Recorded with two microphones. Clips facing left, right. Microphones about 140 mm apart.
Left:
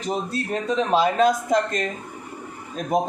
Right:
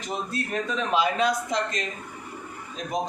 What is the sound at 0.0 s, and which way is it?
A man's voice, 30° left (ahead or behind).